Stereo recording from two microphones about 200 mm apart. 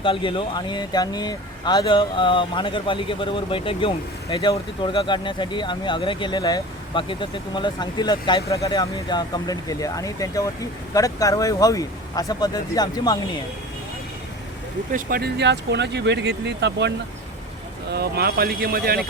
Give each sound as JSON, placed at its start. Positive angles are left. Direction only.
{"t": 0.0, "sound": "speech", "side_deg": 25}
{"t": 14.9, "sound": "speech", "side_deg": -50}